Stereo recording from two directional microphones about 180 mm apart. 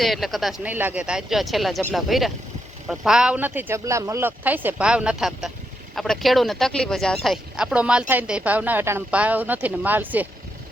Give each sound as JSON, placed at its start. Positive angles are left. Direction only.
{"t": 0.0, "sound": "speech", "side_deg": 0}